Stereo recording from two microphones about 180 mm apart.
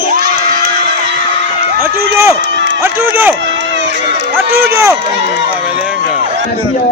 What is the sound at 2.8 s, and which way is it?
Speech, 10° right (ahead or behind).